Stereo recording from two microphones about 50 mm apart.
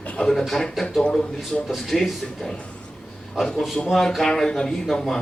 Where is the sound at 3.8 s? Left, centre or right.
Centre.